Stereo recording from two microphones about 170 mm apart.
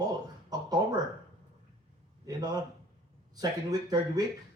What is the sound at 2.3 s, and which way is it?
Speech, 20° right (ahead or behind).